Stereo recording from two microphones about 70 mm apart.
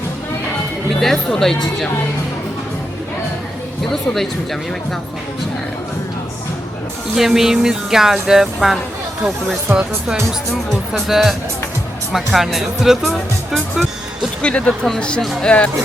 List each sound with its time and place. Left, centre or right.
0.9 s speech: centre
3.8 s speech: centre
7.2 s speech: centre
9.7 s speech: right
11.1 s speech: centre
14.4 s speech: centre